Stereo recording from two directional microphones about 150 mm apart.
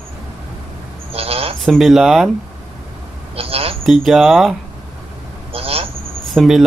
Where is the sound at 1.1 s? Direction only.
40° right (ahead or behind).